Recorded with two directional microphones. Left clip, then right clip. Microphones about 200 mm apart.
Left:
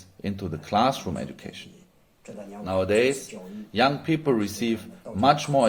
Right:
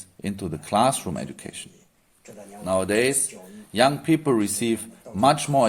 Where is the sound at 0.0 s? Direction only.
25° right (ahead or behind).